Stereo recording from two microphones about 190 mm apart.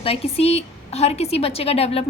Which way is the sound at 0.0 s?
30° left (ahead or behind).